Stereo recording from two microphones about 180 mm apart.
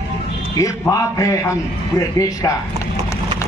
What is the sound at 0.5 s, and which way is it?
A man's voice, 20° left (ahead or behind).